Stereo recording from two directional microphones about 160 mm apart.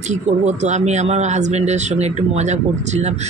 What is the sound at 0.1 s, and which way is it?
Speech, 45° right (ahead or behind).